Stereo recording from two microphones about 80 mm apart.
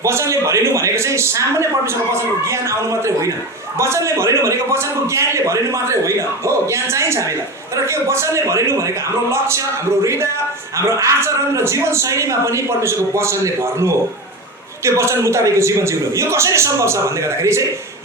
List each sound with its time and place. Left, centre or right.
0.0 s a man's voice: right
10.0 s a man's voice: right